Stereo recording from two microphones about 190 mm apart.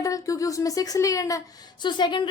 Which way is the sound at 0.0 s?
15° left (ahead or behind).